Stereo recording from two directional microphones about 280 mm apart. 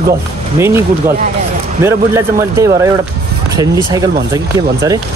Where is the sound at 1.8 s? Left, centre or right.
Centre.